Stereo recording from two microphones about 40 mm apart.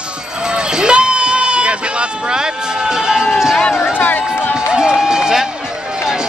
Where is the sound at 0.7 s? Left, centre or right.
Right.